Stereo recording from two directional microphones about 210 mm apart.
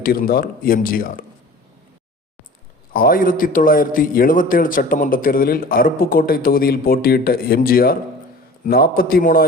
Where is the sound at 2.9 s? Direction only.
45° left (ahead or behind).